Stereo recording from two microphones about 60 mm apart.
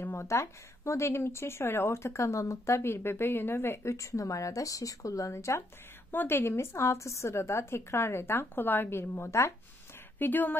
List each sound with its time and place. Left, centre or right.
0.2 s speech: left
3.9 s speech: left
5.3 s speech: left
10.1 s speech: left